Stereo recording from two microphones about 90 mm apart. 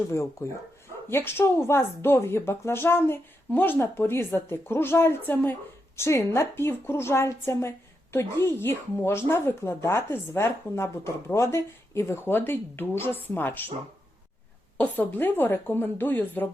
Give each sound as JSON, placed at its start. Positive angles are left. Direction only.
{"t": 0.1, "sound": "speech", "side_deg": 35}
{"t": 6.0, "sound": "speech", "side_deg": 30}
{"t": 14.8, "sound": "speech", "side_deg": 20}